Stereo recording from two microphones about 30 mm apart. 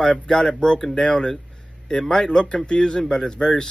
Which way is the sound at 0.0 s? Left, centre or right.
Left.